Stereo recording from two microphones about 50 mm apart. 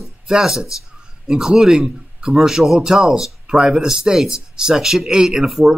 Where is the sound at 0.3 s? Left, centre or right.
Centre.